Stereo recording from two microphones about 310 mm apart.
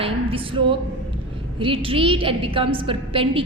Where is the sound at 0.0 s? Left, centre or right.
Centre.